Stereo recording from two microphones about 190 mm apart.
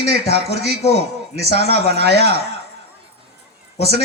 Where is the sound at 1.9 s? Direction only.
60° right (ahead or behind).